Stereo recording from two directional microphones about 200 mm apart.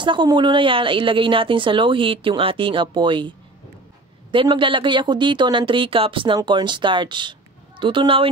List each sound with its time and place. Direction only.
0.0 s speech: 25° right (ahead or behind)